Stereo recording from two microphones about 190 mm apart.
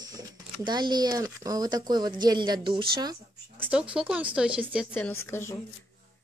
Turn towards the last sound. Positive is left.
turn(degrees=10)  # may be behind; listen again after turning